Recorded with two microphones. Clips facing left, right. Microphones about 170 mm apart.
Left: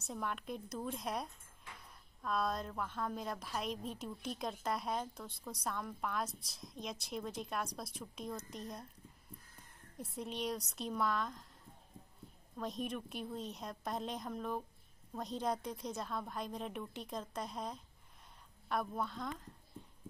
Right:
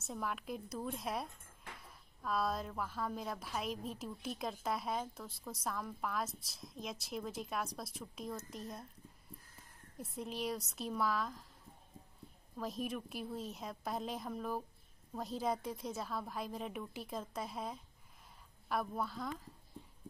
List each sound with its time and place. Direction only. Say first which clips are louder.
0.0 s a woman's voice: even; centre (ahead or behind)
12.5 s a woman's voice: even; 5° right (ahead or behind)